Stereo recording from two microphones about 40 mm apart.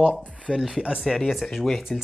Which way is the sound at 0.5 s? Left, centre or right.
Centre.